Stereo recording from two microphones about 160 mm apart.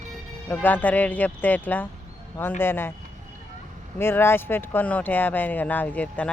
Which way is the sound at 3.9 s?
15° left (ahead or behind).